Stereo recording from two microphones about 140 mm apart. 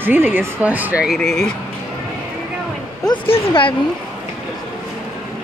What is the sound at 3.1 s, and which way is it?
Speech, 40° left (ahead or behind).